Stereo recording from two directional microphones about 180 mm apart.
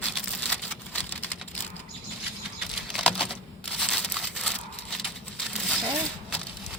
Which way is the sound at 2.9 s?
Centre (ahead or behind).